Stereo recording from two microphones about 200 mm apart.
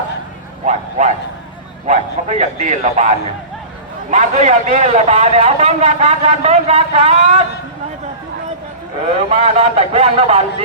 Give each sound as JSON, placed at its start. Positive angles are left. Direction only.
{"t": 0.6, "sound": "a man's voice", "side_deg": -35}
{"t": 9.1, "sound": "a man's voice", "side_deg": -30}